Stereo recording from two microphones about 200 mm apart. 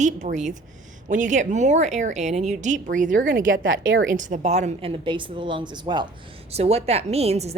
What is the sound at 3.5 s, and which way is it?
Speech, 75° right (ahead or behind).